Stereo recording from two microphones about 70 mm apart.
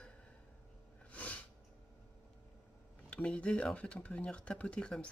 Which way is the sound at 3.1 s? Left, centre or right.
Centre.